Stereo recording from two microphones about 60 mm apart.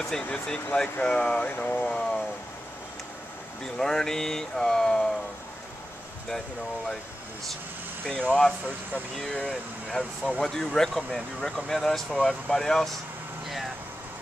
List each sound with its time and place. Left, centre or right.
0.2 s speech: centre
3.6 s speech: centre
8.0 s speech: centre